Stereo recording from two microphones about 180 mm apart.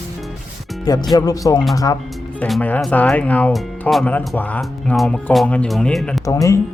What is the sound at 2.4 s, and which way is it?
Speech, 5° left (ahead or behind).